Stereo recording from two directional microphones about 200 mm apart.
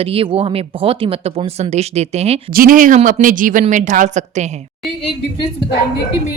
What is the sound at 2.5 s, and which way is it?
A woman's voice, 45° right (ahead or behind).